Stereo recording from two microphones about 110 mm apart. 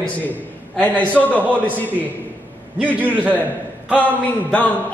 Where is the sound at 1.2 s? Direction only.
Centre (ahead or behind).